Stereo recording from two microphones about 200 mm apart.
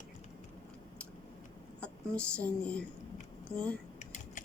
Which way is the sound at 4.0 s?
40° left (ahead or behind).